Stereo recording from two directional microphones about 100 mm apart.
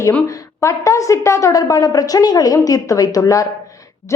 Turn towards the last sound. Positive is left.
turn(degrees=35)  # may be behind; listen again after turning